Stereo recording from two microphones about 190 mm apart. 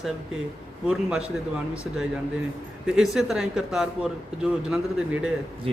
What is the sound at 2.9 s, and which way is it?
A man's voice, centre (ahead or behind).